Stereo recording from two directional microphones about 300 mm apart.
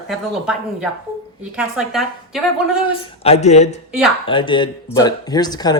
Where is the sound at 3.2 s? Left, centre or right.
Left.